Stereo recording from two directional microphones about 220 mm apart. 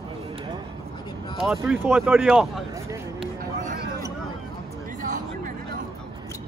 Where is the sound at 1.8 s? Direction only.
10° right (ahead or behind).